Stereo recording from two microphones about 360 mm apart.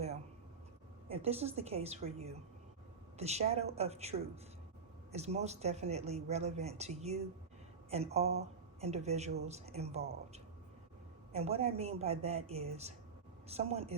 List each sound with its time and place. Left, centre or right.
1.0 s speech: centre